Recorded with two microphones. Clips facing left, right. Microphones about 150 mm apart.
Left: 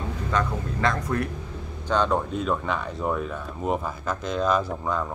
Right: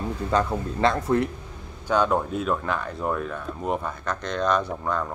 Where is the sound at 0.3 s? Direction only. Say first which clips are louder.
Right 3 dB; 30° right (ahead or behind).